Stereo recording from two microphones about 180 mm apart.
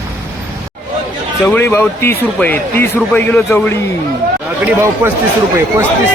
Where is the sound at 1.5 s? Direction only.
10° left (ahead or behind).